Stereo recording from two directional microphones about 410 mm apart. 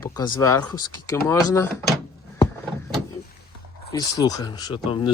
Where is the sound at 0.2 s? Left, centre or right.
Centre.